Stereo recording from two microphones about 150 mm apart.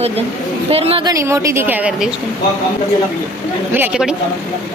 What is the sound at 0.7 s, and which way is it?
Speech, 40° right (ahead or behind).